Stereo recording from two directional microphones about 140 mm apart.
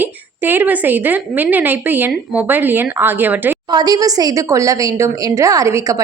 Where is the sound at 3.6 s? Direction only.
30° right (ahead or behind).